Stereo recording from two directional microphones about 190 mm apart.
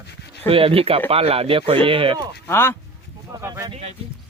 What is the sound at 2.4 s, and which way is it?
Speech, 10° left (ahead or behind).